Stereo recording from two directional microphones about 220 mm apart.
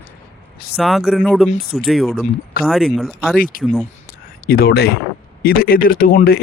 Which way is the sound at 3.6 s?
Centre (ahead or behind).